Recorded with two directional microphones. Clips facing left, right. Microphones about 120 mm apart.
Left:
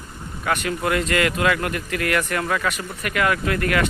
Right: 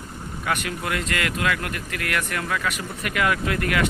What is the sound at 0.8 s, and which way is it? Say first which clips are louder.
Speech: left 7 dB; centre (ahead or behind).